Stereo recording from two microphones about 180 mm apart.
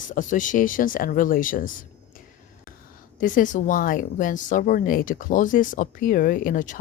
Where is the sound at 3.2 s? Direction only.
45° left (ahead or behind).